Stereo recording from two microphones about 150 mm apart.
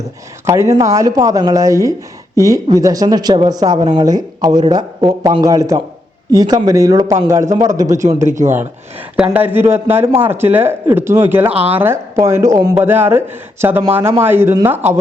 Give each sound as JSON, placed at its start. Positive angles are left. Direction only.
{"t": 0.4, "sound": "a man's voice", "side_deg": -20}